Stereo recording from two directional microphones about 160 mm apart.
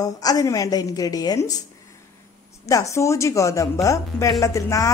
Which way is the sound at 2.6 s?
20° left (ahead or behind).